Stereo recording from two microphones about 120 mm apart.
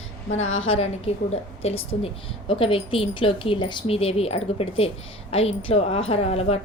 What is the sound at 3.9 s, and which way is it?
A woman's voice, 55° left (ahead or behind).